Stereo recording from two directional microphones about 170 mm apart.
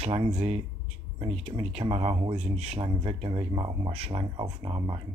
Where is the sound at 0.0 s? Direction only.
30° right (ahead or behind).